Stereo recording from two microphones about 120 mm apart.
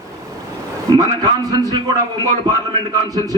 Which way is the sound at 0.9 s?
30° right (ahead or behind).